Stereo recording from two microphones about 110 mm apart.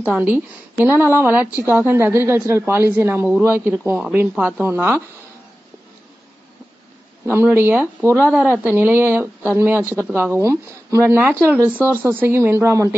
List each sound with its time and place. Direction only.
0.0 s a woman's voice: 15° right (ahead or behind)
7.2 s a woman's voice: 20° right (ahead or behind)